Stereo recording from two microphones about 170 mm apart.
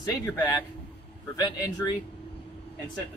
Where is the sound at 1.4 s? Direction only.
25° left (ahead or behind).